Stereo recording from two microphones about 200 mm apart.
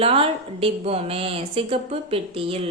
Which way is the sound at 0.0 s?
30° right (ahead or behind).